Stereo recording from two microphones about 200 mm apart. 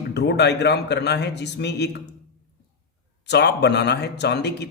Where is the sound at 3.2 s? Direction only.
55° left (ahead or behind).